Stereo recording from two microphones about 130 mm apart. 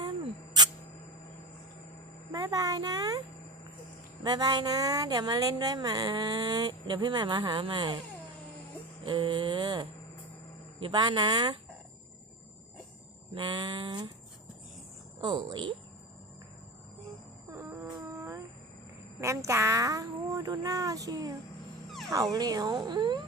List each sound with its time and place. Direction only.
2.3 s speech: 25° right (ahead or behind)
4.2 s speech: 30° right (ahead or behind)
9.0 s speech: 40° right (ahead or behind)
13.3 s speech: 35° right (ahead or behind)
15.2 s speech: 35° right (ahead or behind)
17.5 s music: 25° right (ahead or behind)
19.2 s speech: 20° right (ahead or behind)
21.8 s dog: centre (ahead or behind)
22.1 s speech: 30° right (ahead or behind)